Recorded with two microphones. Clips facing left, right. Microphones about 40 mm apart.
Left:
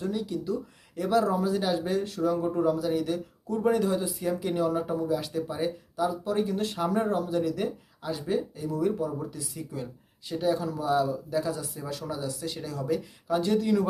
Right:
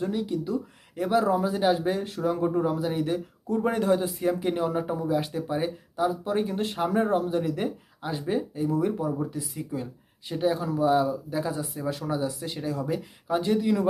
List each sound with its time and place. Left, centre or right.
0.0 s speech: right
4.3 s speech: right